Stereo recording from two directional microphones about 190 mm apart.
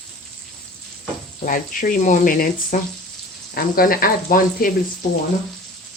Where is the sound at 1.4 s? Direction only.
45° left (ahead or behind).